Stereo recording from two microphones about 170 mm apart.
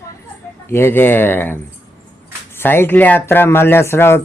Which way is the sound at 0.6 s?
15° left (ahead or behind).